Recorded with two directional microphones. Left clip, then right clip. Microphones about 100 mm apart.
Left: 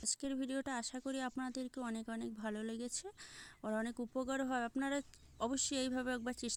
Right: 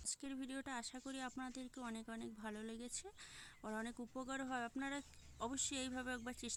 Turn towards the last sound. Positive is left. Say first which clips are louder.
# left 6 dB
turn(degrees=45)  # may be behind; listen again after turning